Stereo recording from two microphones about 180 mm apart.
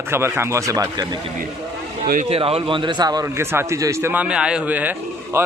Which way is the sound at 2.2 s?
35° right (ahead or behind).